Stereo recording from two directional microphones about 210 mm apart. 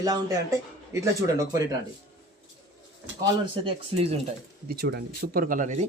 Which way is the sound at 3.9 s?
25° right (ahead or behind).